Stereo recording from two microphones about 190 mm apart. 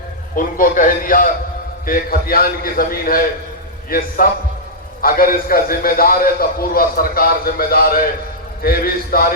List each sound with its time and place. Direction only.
0.3 s a man's voice: 45° left (ahead or behind)